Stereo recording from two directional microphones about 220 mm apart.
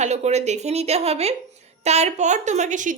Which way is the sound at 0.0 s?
30° right (ahead or behind).